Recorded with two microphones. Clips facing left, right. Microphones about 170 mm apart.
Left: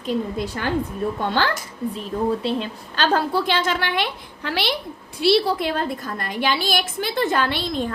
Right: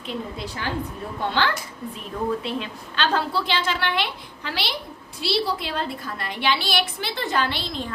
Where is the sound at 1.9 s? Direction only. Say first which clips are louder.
Left 3 dB; 35° left (ahead or behind).